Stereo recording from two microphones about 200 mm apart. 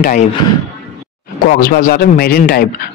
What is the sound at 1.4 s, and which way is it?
Speech, 45° left (ahead or behind).